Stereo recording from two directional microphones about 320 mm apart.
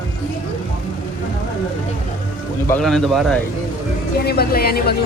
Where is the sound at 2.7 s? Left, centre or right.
Centre.